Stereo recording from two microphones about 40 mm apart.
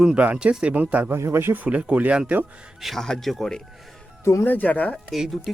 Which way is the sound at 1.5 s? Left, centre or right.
Right.